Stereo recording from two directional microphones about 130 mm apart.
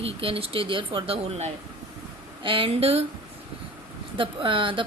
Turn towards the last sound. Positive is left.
turn(degrees=-40)  # may be behind; listen again after turning